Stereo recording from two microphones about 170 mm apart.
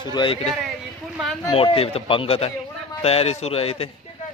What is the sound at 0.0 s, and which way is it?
A man's voice, 25° left (ahead or behind).